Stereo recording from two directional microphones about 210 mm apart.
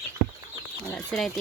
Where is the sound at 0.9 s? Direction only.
Centre (ahead or behind).